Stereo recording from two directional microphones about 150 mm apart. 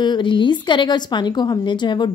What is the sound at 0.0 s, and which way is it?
A woman's voice, 30° left (ahead or behind).